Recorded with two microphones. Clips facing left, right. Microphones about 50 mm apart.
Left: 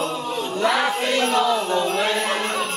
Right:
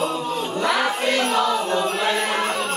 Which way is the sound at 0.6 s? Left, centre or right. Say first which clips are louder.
Left 1 dB; centre.